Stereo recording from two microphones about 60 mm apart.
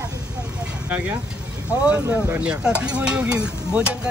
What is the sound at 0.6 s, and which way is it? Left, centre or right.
Vehicle, right.